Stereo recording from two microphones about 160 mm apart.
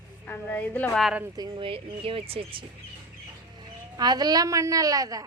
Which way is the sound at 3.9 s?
25° right (ahead or behind).